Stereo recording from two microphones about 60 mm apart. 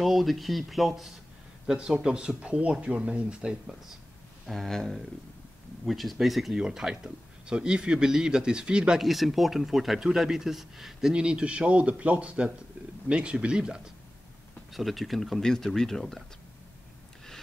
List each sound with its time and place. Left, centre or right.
0.0 s speech: centre
4.5 s speech: centre
9.0 s speech: centre
11.1 s a man's voice: centre
14.7 s speech: centre